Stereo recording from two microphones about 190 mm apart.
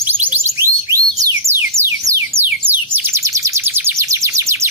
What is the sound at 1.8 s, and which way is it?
Music, 15° right (ahead or behind).